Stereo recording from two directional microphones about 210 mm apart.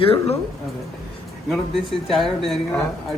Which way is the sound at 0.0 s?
25° left (ahead or behind).